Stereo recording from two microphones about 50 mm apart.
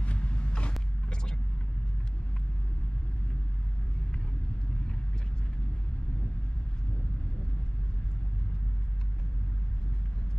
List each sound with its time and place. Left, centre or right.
0.0 s vehicle: left